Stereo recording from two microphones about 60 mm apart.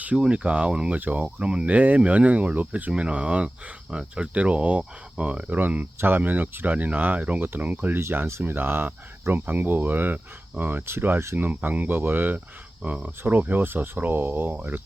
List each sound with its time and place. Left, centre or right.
0.0 s speech: right
0.9 s speech: right
1.4 s speech: centre
5.5 s speech: right